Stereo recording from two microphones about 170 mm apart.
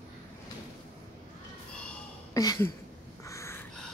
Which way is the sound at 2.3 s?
20° left (ahead or behind).